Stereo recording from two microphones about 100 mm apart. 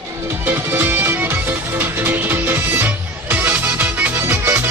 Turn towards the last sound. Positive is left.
turn(degrees=-20)  # may be behind; listen again after turning